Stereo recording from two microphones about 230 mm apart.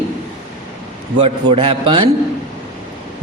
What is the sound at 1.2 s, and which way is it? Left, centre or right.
Speech, right.